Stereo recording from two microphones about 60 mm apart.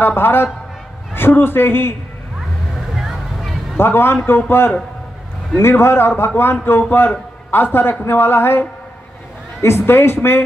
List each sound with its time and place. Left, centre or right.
0.0 s a man's voice: left
2.7 s music: centre
3.7 s a man's voice: left